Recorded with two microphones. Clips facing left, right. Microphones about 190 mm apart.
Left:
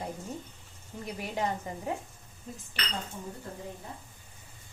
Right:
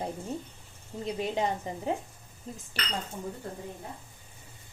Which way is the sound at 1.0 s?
20° right (ahead or behind).